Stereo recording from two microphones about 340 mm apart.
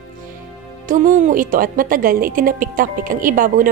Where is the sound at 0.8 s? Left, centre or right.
Right.